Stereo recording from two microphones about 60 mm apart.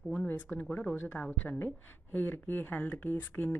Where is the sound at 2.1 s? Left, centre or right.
Left.